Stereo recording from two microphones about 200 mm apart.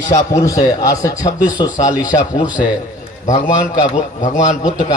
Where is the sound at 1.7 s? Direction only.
40° left (ahead or behind).